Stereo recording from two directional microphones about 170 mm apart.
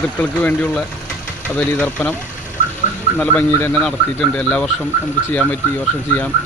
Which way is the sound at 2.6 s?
50° left (ahead or behind).